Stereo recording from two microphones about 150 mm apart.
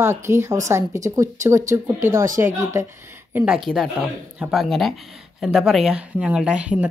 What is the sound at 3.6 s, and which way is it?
Speech, centre (ahead or behind).